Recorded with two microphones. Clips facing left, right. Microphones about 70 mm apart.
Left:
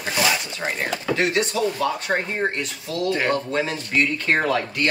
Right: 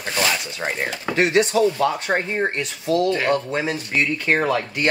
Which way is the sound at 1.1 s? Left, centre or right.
Right.